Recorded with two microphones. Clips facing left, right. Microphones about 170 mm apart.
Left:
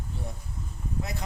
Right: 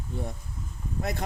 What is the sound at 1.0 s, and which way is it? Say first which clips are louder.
Speech: right 5 dB; 50° right (ahead or behind).